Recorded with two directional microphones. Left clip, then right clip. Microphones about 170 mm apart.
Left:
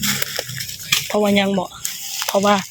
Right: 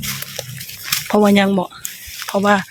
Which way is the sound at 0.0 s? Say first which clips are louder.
Left 4 dB; 55° left (ahead or behind).